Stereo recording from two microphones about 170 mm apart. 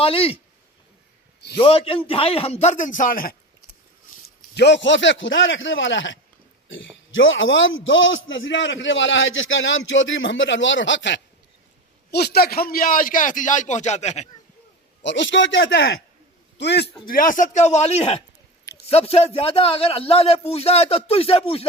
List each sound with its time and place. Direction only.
0.0 s a man's voice: 35° left (ahead or behind)
1.5 s a man's voice: 35° left (ahead or behind); by 3.3 s 55° left (ahead or behind)
4.5 s a man's voice: 85° left
7.3 s a man's voice: 90° left
12.1 s a man's voice: 70° left (ahead or behind); by 14.3 s 40° left (ahead or behind)
15.0 s a man's voice: 90° left
17.1 s a man's voice: 50° left (ahead or behind); by 21.7 s 35° left (ahead or behind)